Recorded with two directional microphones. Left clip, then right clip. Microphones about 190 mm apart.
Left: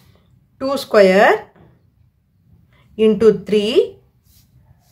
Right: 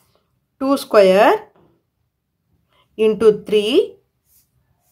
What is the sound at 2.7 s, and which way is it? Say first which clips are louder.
A woman's voice: left 2 dB; 25° right (ahead or behind).